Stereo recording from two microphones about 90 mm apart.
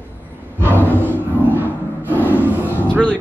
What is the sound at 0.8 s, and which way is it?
Roar, 20° left (ahead or behind).